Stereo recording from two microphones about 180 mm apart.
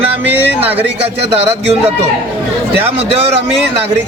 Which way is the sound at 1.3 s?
35° right (ahead or behind).